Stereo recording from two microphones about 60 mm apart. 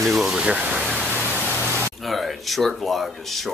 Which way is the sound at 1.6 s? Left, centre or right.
Right.